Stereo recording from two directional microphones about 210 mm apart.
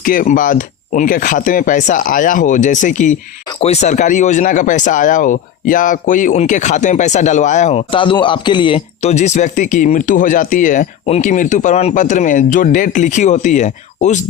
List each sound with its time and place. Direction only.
0.0 s speech: 40° left (ahead or behind)